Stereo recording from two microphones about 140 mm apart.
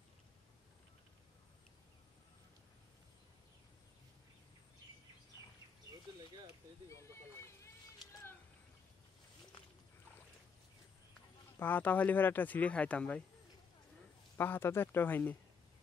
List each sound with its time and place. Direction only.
6.9 s a sound: 20° left (ahead or behind)
11.5 s speech: 15° left (ahead or behind)
14.3 s speech: 15° left (ahead or behind)